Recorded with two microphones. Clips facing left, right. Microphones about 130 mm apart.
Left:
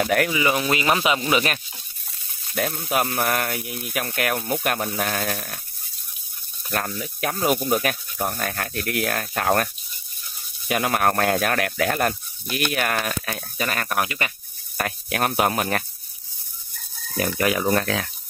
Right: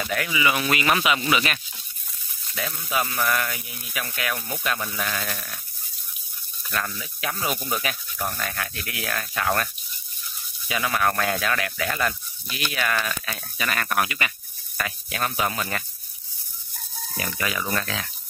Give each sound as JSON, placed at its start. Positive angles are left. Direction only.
{"t": 0.0, "sound": "speech", "side_deg": 55}
{"t": 0.6, "sound": "speech", "side_deg": 25}
{"t": 1.3, "sound": "speech", "side_deg": 40}
{"t": 2.6, "sound": "speech", "side_deg": 60}
{"t": 6.7, "sound": "speech", "side_deg": 40}
{"t": 10.7, "sound": "speech", "side_deg": 50}
{"t": 14.8, "sound": "speech", "side_deg": 60}
{"t": 17.2, "sound": "speech", "side_deg": 55}